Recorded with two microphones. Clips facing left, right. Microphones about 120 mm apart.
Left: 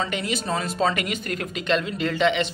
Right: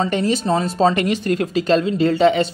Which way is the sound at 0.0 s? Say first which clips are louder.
Right 8 dB; 35° right (ahead or behind).